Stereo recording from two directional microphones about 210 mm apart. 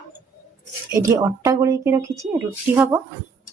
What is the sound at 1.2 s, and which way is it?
A woman's voice, 15° right (ahead or behind).